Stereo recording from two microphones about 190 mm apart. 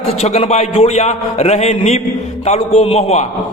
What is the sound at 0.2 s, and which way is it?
A man's voice, 35° left (ahead or behind).